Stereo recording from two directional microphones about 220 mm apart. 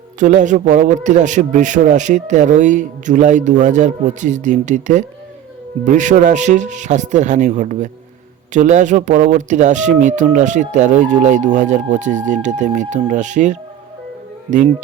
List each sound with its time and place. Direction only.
0.2 s speech: 35° right (ahead or behind)